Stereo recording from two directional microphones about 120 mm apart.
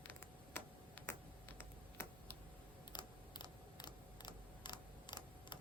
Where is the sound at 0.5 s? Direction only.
15° left (ahead or behind).